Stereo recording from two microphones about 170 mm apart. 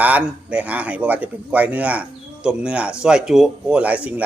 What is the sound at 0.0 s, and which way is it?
A man's voice, 10° right (ahead or behind).